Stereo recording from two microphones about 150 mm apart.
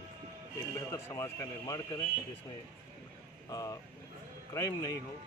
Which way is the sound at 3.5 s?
25° left (ahead or behind).